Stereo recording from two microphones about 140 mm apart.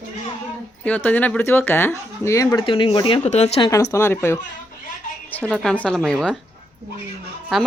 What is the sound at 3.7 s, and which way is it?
Speech, 20° left (ahead or behind).